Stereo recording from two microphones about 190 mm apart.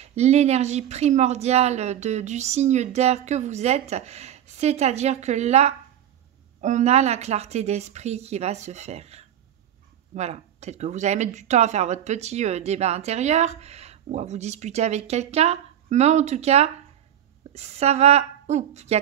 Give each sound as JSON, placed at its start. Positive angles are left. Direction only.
{"t": 0.0, "sound": "speech", "side_deg": -35}